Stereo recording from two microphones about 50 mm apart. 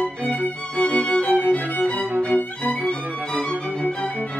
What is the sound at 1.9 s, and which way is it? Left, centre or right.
Violin, right.